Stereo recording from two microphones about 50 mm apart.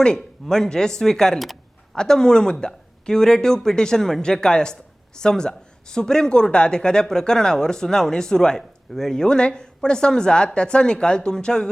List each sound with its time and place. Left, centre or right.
0.0 s speech: centre